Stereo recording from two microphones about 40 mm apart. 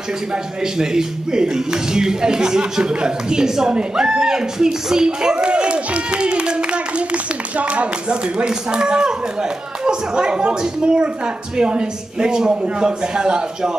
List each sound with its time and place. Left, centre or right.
0.7 s speech: centre